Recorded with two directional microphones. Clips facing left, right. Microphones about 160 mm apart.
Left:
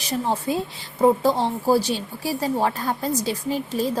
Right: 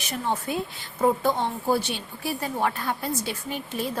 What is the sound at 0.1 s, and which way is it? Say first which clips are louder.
A woman's voice: left 4 dB; 35° left (ahead or behind).